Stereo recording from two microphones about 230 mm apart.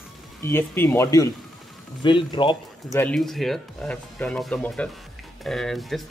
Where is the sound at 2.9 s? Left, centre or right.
Centre.